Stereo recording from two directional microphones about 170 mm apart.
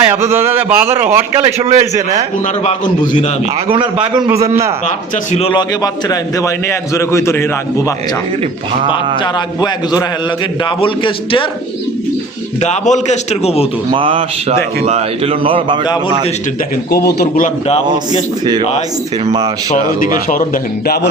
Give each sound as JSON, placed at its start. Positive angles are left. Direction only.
{"t": 0.0, "sound": "a man's voice", "side_deg": -15}
{"t": 1.5, "sound": "speech", "side_deg": -40}
{"t": 2.6, "sound": "a man's voice", "side_deg": 30}
{"t": 5.5, "sound": "a man's voice", "side_deg": 20}
{"t": 9.2, "sound": "a man's voice", "side_deg": 25}
{"t": 12.6, "sound": "a man's voice", "side_deg": 45}
{"t": 13.9, "sound": "speech", "side_deg": -30}
{"t": 15.8, "sound": "a man's voice", "side_deg": 25}
{"t": 17.2, "sound": "a man's voice", "side_deg": 55}
{"t": 20.1, "sound": "a man's voice", "side_deg": 55}